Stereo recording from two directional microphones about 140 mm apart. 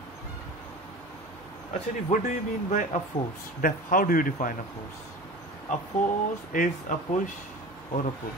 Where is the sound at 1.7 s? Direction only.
60° left (ahead or behind).